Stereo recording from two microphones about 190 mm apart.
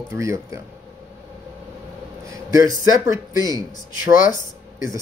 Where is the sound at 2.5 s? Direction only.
15° right (ahead or behind).